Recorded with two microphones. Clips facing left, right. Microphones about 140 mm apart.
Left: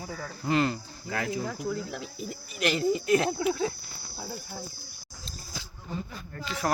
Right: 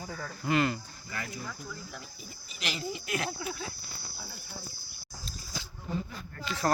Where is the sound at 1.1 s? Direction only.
90° left; by 2.4 s 75° left (ahead or behind).